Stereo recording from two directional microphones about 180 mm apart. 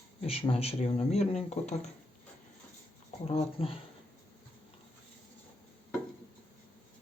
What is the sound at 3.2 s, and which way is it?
Speech, 35° left (ahead or behind).